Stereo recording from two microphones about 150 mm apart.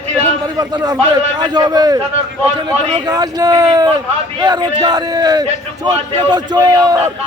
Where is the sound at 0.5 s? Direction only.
25° right (ahead or behind).